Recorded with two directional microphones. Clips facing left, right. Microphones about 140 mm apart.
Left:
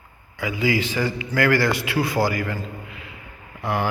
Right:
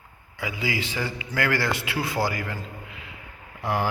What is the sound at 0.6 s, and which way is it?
A man's voice, 25° right (ahead or behind).